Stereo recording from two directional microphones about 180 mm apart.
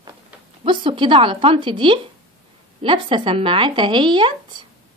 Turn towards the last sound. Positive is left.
turn(degrees=-25)  # may be behind; listen again after turning